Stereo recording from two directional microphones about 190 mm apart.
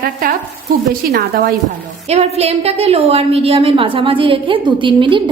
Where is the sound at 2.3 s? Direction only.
35° right (ahead or behind).